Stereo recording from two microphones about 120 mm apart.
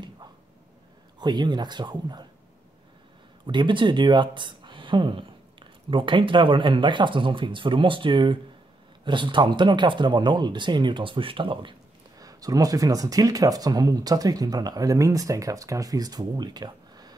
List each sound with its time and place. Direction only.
1.2 s speech: 40° right (ahead or behind)
3.4 s speech: 40° right (ahead or behind)
12.2 s speech: 30° right (ahead or behind)